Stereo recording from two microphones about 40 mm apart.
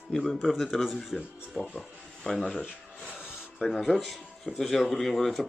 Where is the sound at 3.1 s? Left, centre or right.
Centre.